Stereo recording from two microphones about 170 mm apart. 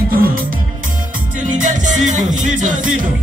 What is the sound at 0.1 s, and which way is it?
Music, 60° right (ahead or behind).